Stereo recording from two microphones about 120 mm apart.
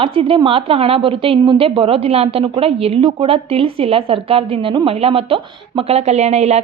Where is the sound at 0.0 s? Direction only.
50° right (ahead or behind).